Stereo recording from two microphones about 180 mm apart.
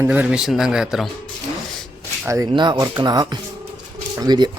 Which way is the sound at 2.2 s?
15° right (ahead or behind).